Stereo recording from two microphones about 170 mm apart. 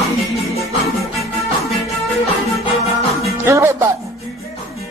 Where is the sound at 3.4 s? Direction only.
15° right (ahead or behind).